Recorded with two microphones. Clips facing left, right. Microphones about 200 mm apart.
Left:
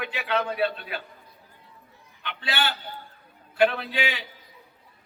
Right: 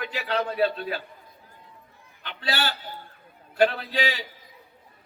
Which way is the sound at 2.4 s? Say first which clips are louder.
Right 1 dB; 40° right (ahead or behind).